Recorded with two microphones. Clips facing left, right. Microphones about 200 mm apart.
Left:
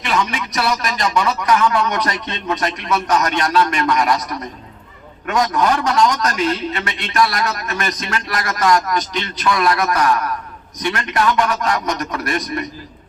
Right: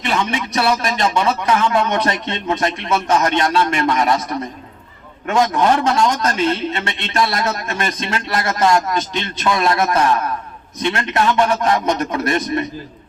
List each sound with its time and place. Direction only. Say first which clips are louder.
0.0 s a man's voice: right 1 dB; 25° right (ahead or behind)